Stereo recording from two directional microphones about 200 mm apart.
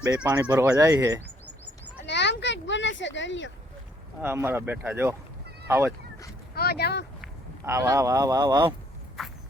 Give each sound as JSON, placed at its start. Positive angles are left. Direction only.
{"t": 0.2, "sound": "speech", "side_deg": -10}
{"t": 2.0, "sound": "sheep", "side_deg": 60}
{"t": 4.2, "sound": "speech", "side_deg": -10}
{"t": 6.5, "sound": "speech", "side_deg": 50}
{"t": 7.6, "sound": "speech", "side_deg": -15}
{"t": 9.2, "sound": "vehicle", "side_deg": 0}